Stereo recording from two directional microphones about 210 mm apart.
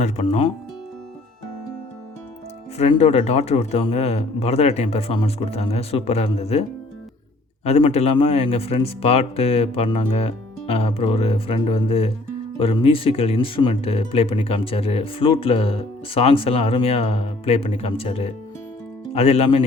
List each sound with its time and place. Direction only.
0.0 s speech: 30° left (ahead or behind)
2.7 s speech: 30° left (ahead or behind)